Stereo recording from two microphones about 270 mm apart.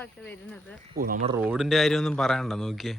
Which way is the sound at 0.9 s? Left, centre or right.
Right.